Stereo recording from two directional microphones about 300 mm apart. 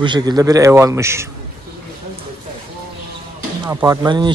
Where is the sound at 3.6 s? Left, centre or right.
Centre.